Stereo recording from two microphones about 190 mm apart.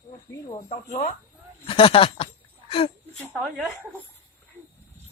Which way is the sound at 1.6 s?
30° left (ahead or behind).